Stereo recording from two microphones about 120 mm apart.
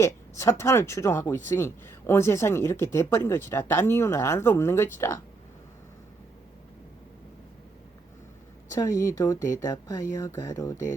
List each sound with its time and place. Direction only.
0.0 s speech: 25° left (ahead or behind)
8.7 s speech: 25° left (ahead or behind)